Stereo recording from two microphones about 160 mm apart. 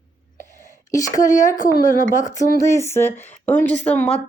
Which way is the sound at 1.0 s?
20° left (ahead or behind).